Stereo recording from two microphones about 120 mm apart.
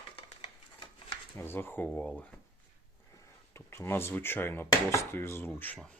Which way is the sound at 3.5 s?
20° left (ahead or behind).